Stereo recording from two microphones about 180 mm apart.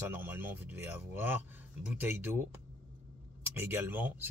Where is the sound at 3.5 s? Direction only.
10° right (ahead or behind).